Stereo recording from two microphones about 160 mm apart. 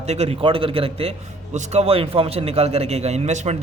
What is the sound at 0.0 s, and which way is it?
A man's voice, 40° right (ahead or behind).